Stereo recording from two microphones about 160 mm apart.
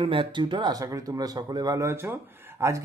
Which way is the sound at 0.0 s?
35° right (ahead or behind).